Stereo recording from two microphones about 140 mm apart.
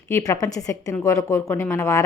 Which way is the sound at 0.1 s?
25° left (ahead or behind).